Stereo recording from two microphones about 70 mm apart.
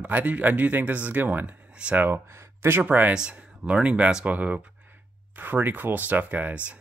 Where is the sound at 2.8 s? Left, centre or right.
Right.